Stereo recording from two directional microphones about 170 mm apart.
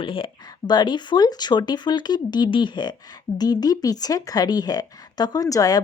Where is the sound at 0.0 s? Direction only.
30° left (ahead or behind).